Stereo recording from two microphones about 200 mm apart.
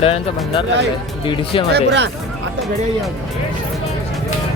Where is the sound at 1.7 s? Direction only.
60° right (ahead or behind).